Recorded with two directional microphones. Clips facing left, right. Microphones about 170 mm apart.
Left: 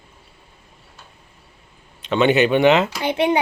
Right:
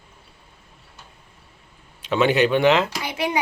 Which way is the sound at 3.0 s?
30° left (ahead or behind).